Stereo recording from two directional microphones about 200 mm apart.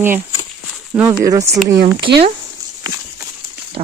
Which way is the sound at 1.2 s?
15° right (ahead or behind).